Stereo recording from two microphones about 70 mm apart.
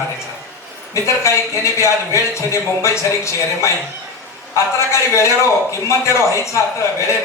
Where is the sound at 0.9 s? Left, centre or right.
Left.